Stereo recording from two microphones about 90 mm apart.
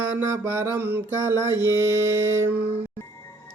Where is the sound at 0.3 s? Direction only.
30° right (ahead or behind).